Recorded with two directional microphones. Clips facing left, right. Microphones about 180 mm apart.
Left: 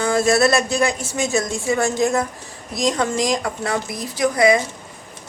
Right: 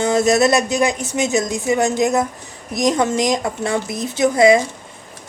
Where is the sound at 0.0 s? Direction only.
20° right (ahead or behind).